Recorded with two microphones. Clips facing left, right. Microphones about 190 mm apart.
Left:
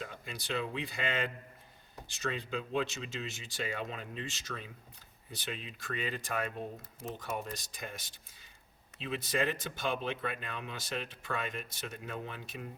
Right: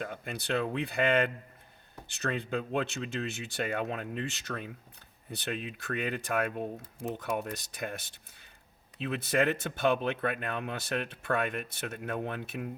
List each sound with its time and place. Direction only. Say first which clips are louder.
0.0 s speech: right 6 dB; 60° right (ahead or behind)